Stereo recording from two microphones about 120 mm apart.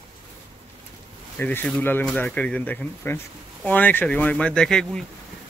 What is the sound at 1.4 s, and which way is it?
A man's voice, 15° left (ahead or behind).